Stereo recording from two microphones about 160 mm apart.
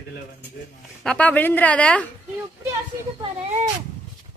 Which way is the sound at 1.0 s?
5° left (ahead or behind).